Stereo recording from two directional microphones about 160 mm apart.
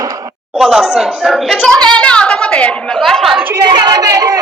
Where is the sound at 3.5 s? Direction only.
25° right (ahead or behind).